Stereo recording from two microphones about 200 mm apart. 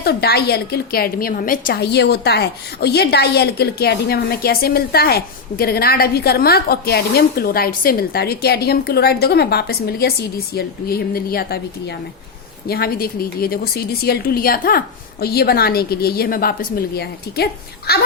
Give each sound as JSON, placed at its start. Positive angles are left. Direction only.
{"t": 0.0, "sound": "a woman's voice", "side_deg": 55}